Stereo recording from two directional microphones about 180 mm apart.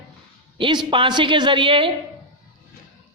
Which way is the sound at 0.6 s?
25° right (ahead or behind).